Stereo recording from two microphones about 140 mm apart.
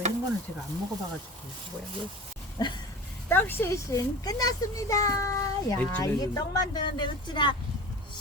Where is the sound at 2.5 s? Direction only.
30° left (ahead or behind).